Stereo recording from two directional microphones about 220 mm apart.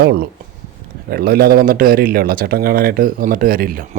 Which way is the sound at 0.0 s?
45° right (ahead or behind).